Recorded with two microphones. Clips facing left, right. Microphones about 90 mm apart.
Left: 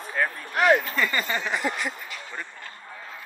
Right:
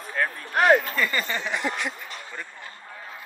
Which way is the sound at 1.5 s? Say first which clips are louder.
Even; centre (ahead or behind).